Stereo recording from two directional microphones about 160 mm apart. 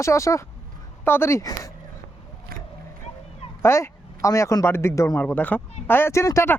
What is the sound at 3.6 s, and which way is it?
A man's voice, 15° left (ahead or behind).